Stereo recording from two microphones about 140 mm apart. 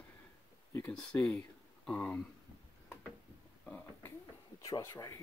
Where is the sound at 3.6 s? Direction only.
10° left (ahead or behind).